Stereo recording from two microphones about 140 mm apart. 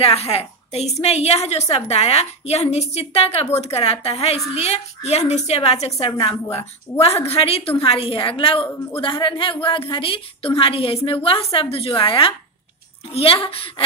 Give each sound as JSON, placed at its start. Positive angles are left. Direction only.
{"t": 0.0, "sound": "a woman's voice", "side_deg": 45}